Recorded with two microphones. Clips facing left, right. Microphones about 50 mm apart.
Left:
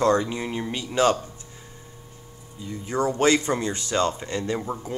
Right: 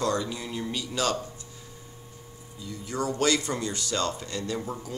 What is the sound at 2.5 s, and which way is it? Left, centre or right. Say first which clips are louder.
Speech: left 5 dB; left.